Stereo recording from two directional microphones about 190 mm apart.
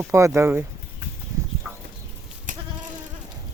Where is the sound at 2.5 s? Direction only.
40° right (ahead or behind).